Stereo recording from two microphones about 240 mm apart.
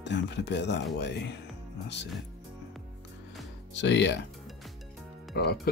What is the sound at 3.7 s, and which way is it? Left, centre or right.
Speech, left.